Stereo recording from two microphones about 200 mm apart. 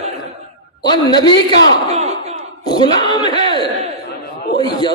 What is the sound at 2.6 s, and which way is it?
A man's voice, 20° left (ahead or behind).